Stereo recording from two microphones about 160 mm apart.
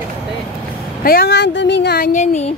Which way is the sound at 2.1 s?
45° left (ahead or behind).